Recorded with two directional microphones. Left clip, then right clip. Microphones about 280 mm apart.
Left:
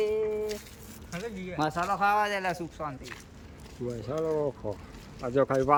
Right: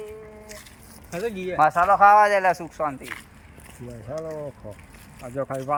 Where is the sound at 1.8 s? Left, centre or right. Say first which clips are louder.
Right 11 dB; centre.